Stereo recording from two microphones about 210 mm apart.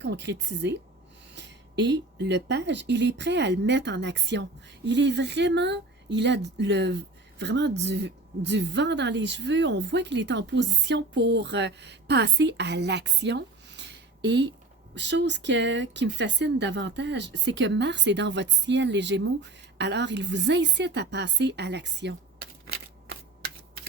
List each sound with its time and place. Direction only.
0.0 s speech: 55° right (ahead or behind)
22.6 s typewriter: 50° right (ahead or behind)